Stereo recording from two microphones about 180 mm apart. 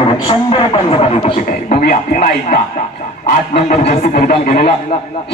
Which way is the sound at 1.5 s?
55° left (ahead or behind).